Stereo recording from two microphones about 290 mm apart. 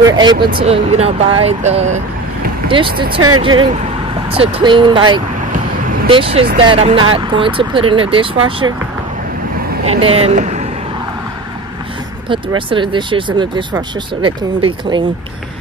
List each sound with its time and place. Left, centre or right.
0.0 s speech: centre
3.2 s speech: right
4.3 s speech: centre
9.8 s speech: centre
12.3 s speech: centre